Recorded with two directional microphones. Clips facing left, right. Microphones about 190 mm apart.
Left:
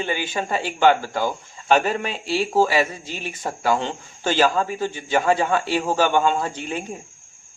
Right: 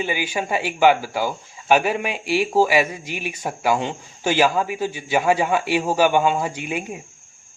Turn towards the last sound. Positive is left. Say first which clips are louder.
# right 1 dB
turn(degrees=-10)  # may be behind; listen again after turning